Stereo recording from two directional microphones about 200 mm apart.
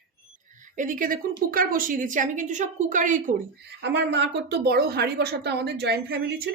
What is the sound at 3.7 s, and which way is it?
Speech, 60° right (ahead or behind).